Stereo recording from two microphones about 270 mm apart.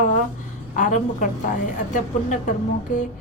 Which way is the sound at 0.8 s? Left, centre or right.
Left.